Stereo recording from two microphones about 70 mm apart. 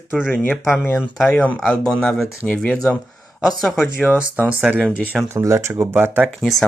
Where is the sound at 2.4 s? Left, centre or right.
Left.